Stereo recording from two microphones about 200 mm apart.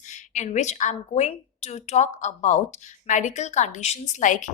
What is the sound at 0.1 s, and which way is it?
A woman's voice, 35° left (ahead or behind).